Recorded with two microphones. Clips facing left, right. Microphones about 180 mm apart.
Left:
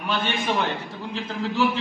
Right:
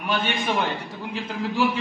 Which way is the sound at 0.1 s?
10° right (ahead or behind).